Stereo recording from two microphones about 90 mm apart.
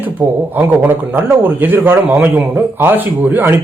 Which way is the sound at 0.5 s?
20° right (ahead or behind).